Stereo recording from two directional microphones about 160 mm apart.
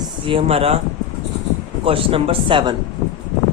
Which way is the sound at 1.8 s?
35° right (ahead or behind).